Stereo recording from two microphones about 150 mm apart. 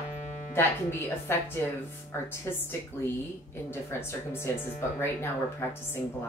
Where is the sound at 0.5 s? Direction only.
15° left (ahead or behind).